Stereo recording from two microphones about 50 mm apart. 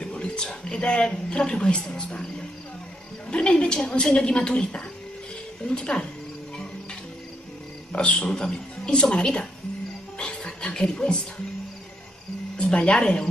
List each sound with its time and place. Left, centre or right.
0.0 s speech: centre
7.9 s speech: left
10.1 s music: centre
12.5 s speech: centre